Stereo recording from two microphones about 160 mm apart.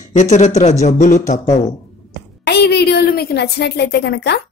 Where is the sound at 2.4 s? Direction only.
90° left.